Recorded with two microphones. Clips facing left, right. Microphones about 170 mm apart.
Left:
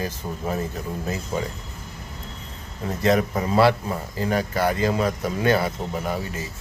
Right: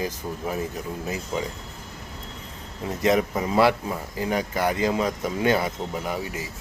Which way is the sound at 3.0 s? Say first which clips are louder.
Left 1 dB; 15° right (ahead or behind).